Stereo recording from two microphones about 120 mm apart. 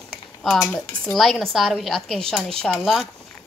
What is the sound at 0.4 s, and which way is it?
A woman's voice, 5° left (ahead or behind).